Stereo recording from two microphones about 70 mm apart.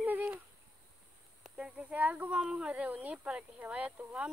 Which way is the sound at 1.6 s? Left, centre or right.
Centre.